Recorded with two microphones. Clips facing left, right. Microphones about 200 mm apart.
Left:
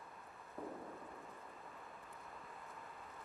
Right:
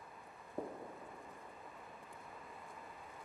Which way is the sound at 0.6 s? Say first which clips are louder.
Right 4 dB; 30° right (ahead or behind).